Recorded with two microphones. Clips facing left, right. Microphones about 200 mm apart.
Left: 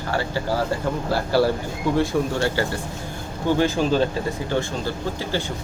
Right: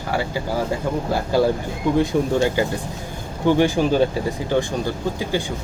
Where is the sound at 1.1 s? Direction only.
15° right (ahead or behind).